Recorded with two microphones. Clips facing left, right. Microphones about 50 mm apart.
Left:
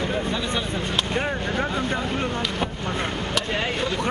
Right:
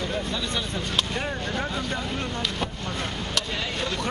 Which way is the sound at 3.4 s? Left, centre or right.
Left.